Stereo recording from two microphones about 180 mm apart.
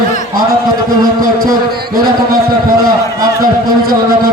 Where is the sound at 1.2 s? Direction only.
50° right (ahead or behind).